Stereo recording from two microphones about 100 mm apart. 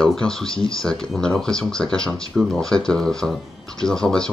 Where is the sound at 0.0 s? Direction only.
5° left (ahead or behind).